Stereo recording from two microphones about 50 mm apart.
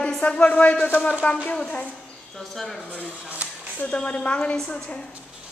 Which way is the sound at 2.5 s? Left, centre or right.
Centre.